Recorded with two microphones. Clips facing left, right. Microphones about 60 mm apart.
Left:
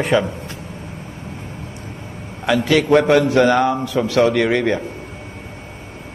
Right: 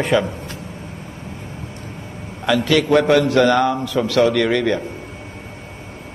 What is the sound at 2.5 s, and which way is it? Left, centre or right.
A man's voice, centre.